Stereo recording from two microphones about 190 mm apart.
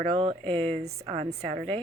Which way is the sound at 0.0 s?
30° right (ahead or behind).